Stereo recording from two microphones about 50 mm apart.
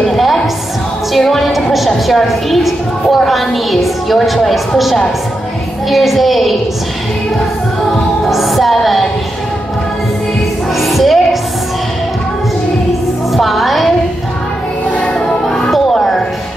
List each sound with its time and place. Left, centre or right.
0.0 s music: centre
1.7 s a woman's voice: centre
8.3 s music: centre
10.8 s music: centre
13.3 s music: centre
14.9 s music: left